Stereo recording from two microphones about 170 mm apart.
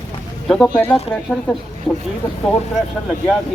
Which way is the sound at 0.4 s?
5° left (ahead or behind).